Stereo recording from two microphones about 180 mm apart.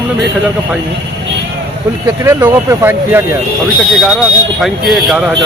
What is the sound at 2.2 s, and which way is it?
Speech, 15° right (ahead or behind).